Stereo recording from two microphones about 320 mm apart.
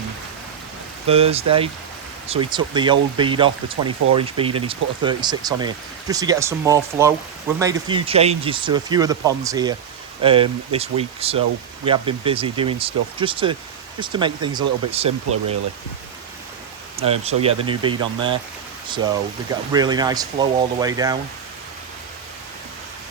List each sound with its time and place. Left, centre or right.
1.0 s speech: centre
17.0 s speech: centre